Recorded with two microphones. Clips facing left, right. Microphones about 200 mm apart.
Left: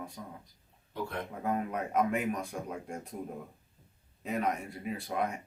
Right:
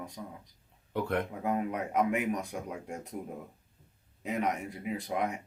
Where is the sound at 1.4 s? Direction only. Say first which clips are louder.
Right 1 dB; 15° right (ahead or behind).